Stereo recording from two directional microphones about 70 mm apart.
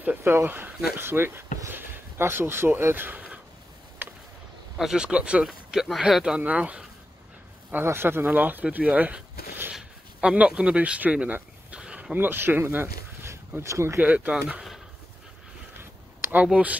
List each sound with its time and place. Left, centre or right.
0.2 s speech: right
0.9 s speech: right
4.0 s a sound: right
4.7 s speech: centre
5.4 s speech: centre
7.7 s speech: right
11.7 s a sound: centre; by 13.4 s right
13.6 s speech: right
13.9 s speech: right
15.8 s a sound: right